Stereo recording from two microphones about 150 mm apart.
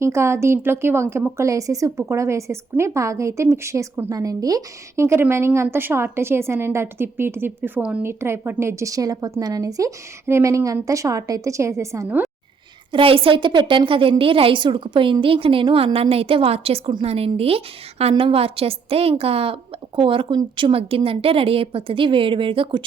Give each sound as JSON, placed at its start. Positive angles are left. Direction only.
{"t": 0.0, "sound": "speech", "side_deg": -20}
{"t": 12.9, "sound": "a woman's voice", "side_deg": -35}